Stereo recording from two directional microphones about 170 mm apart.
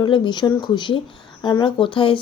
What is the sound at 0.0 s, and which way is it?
A woman's voice, 25° left (ahead or behind).